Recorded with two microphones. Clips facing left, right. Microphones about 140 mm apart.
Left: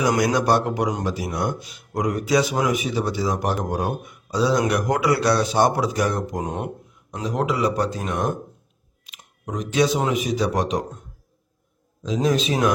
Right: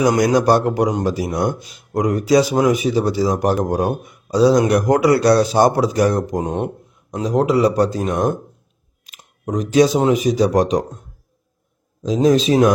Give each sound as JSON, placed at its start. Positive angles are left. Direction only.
{"t": 0.0, "sound": "speech", "side_deg": -40}
{"t": 12.0, "sound": "speech", "side_deg": -40}